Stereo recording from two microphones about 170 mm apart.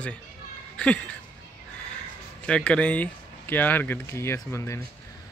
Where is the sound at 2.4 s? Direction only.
5° left (ahead or behind).